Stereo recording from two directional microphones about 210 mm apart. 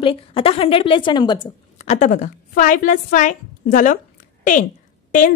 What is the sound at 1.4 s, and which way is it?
A woman's voice, 35° left (ahead or behind).